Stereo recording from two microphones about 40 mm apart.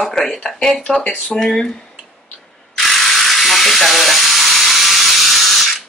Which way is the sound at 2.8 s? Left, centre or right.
Centre.